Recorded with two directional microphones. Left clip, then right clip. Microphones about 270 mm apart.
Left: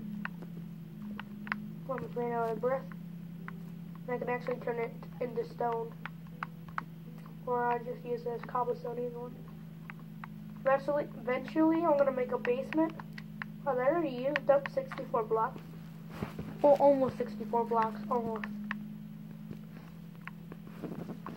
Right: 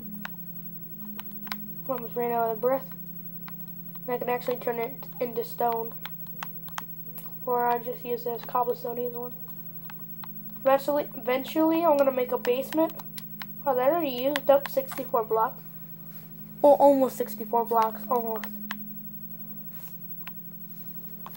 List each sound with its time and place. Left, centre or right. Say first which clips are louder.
1.9 s speech: right 7 dB; right
4.1 s speech: right 6 dB; right
7.4 s speech: right 6 dB; right
10.8 s speech: right 5 dB; right
16.6 s speech: right 6 dB; right